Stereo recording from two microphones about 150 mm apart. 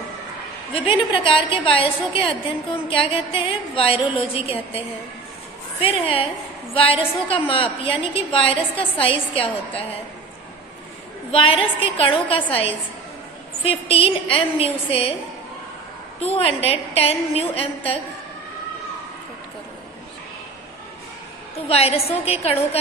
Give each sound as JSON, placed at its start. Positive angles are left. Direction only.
{"t": 0.7, "sound": "a woman's voice", "side_deg": 35}
{"t": 5.8, "sound": "a woman's voice", "side_deg": 40}
{"t": 11.3, "sound": "a woman's voice", "side_deg": 35}
{"t": 13.7, "sound": "a woman's voice", "side_deg": 40}
{"t": 16.2, "sound": "a woman's voice", "side_deg": 40}
{"t": 21.7, "sound": "a woman's voice", "side_deg": 40}